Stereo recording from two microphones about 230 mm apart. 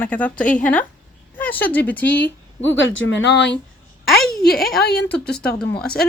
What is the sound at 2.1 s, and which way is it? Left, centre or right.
Speech, left.